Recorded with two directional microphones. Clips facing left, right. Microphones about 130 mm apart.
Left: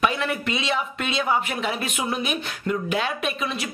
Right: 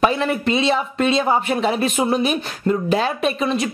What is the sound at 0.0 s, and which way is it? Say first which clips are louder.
Speech: right 6 dB; 35° right (ahead or behind).